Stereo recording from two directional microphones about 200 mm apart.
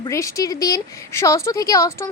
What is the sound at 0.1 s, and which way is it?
A woman's voice, 15° left (ahead or behind).